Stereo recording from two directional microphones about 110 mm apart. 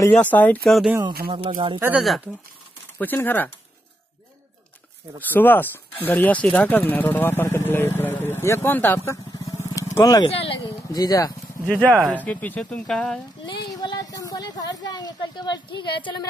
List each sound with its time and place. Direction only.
0.1 s speech: 15° left (ahead or behind)
0.7 s speech: centre (ahead or behind)
1.0 s speech: 50° right (ahead or behind)
2.0 s speech: centre (ahead or behind)
3.0 s speech: 15° left (ahead or behind)
5.2 s speech: 15° left (ahead or behind); by 10.2 s 30° left (ahead or behind)
10.2 s speech: 55° left (ahead or behind)
10.9 s a woman's voice: 35° left (ahead or behind)
11.6 s speech: 15° left (ahead or behind)
13.5 s a woman's voice: 40° left (ahead or behind)